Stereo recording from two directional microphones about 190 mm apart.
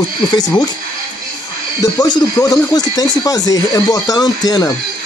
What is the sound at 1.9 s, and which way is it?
Speech, 20° left (ahead or behind).